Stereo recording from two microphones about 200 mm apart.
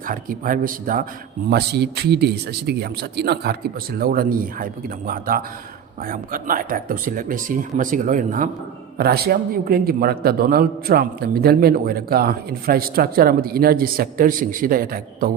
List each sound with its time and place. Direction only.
0.0 s a man's voice: 45° right (ahead or behind)
1.5 s a man's voice: 55° right (ahead or behind)
9.0 s a man's voice: 50° right (ahead or behind)